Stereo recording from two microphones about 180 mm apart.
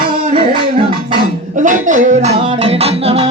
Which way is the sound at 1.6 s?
45° right (ahead or behind).